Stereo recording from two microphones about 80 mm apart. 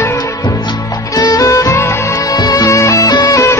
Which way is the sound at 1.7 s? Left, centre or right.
Left.